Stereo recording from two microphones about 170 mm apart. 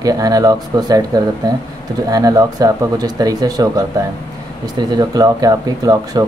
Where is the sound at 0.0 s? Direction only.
20° right (ahead or behind).